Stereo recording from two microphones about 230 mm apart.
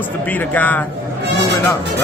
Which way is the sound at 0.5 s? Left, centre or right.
Centre.